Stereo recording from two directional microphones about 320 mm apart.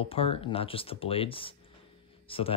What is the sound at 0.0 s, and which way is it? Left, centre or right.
Speech, centre.